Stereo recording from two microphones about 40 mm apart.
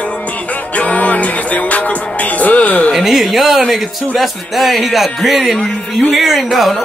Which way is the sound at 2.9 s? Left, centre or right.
Centre.